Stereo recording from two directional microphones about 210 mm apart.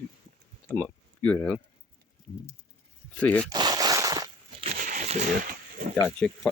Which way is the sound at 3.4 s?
20° right (ahead or behind).